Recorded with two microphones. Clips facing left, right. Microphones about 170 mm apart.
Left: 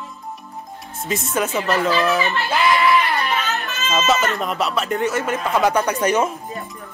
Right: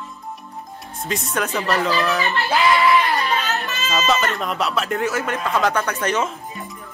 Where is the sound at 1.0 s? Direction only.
Centre (ahead or behind).